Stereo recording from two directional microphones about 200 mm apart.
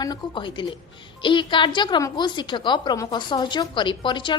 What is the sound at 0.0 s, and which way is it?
A woman's voice, 20° left (ahead or behind).